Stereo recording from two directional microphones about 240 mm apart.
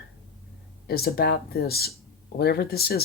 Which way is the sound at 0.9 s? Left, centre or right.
Left.